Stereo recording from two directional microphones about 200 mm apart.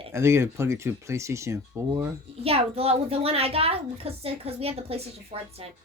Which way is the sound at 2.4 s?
30° right (ahead or behind).